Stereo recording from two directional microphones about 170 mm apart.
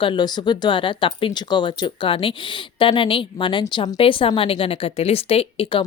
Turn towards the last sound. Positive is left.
turn(degrees=35)  # may be behind; listen again after turning